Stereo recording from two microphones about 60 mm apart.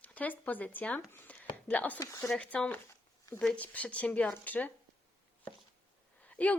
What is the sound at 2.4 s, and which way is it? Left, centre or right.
Speech, centre.